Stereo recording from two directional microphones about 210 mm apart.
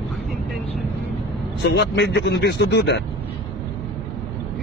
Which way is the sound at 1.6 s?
55° left (ahead or behind).